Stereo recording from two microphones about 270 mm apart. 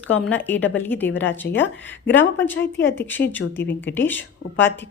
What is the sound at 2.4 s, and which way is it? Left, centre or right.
Speech, centre.